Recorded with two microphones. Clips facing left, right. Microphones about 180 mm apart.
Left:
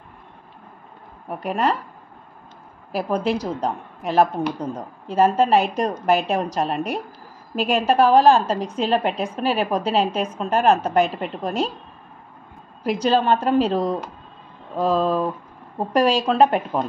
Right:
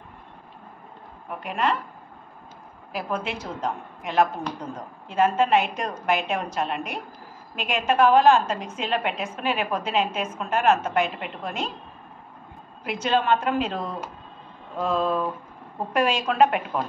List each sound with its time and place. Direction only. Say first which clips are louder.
1.4 s a woman's voice: left 4 dB; 40° left (ahead or behind)
2.9 s a woman's voice: left 7 dB; 40° left (ahead or behind)
13.0 s a woman's voice: left 3 dB; 35° left (ahead or behind)